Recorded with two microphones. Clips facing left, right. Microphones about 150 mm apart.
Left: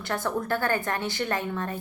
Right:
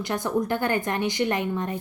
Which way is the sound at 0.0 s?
20° right (ahead or behind).